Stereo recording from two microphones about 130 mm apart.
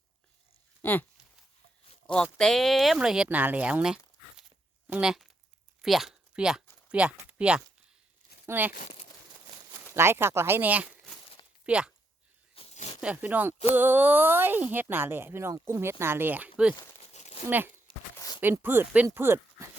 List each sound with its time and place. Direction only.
0.8 s speech: 15° left (ahead or behind)
2.1 s speech: 5° left (ahead or behind); by 8.7 s 15° right (ahead or behind)
8.7 s speech: 80° left
9.9 s speech: 20° right (ahead or behind)
12.5 s a sound: 55° left (ahead or behind)
13.0 s speech: 10° right (ahead or behind)
17.0 s a sound: 60° left (ahead or behind)
17.9 s a sound: 40° left (ahead or behind)
18.3 s speech: 15° right (ahead or behind)